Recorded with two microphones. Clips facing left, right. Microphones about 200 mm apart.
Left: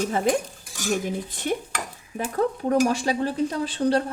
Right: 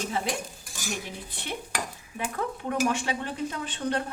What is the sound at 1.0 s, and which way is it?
Speech, 45° left (ahead or behind).